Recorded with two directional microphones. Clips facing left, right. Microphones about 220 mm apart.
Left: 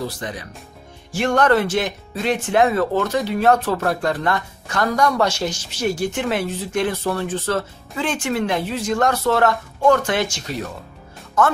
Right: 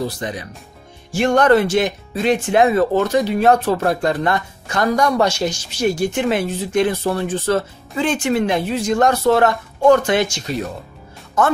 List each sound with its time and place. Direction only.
0.2 s speech: 20° right (ahead or behind)